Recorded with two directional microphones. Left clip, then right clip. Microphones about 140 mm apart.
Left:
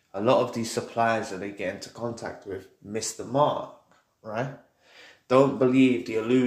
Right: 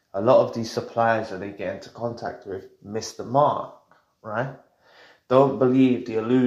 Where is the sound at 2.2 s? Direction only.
5° right (ahead or behind).